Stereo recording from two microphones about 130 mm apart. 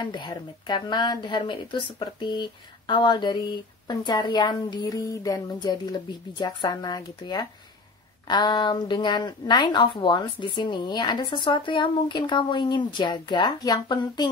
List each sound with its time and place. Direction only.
0.0 s a woman's voice: 35° left (ahead or behind)